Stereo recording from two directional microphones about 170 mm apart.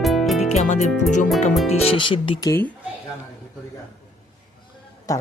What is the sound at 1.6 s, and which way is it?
Speech, 35° left (ahead or behind).